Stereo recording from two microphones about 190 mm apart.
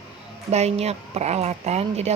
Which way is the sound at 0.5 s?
35° right (ahead or behind).